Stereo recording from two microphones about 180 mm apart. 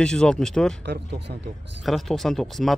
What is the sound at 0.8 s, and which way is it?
Speech, 65° right (ahead or behind).